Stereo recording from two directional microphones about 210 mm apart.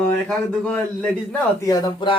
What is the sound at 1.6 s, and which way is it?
Speech, 15° left (ahead or behind).